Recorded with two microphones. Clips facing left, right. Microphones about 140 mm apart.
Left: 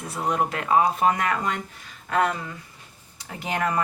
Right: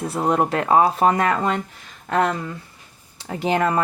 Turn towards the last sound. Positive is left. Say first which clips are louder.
# right 6 dB
turn(degrees=-30)  # may be behind; listen again after turning